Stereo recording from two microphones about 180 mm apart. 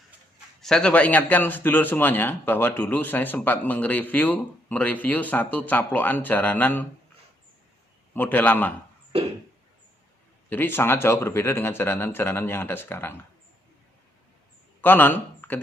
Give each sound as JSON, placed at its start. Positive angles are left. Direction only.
{"t": 0.6, "sound": "a man's voice", "side_deg": 5}
{"t": 8.1, "sound": "a man's voice", "side_deg": 10}
{"t": 9.1, "sound": "a sound", "side_deg": -30}
{"t": 10.5, "sound": "a man's voice", "side_deg": 10}
{"t": 14.8, "sound": "speech", "side_deg": 10}